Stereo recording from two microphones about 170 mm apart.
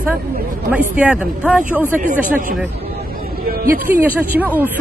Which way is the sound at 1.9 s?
50° right (ahead or behind).